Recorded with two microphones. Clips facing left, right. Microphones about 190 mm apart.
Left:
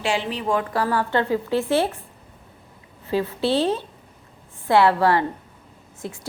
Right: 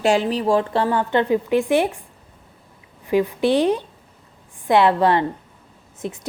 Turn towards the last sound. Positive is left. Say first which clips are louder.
# right 4 dB
turn(degrees=-20)  # may be behind; listen again after turning